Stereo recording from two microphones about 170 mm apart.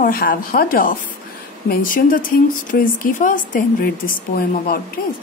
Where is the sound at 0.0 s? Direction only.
55° left (ahead or behind).